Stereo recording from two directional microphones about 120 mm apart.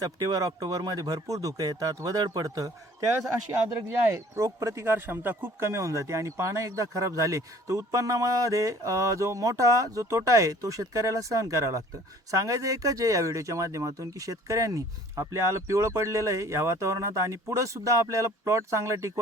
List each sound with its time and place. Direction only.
0.0 s speech: 30° right (ahead or behind)
4.1 s a man's voice: 25° right (ahead or behind)